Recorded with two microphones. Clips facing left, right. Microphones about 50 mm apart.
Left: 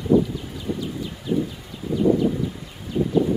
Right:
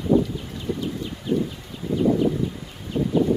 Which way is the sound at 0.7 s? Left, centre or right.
Centre.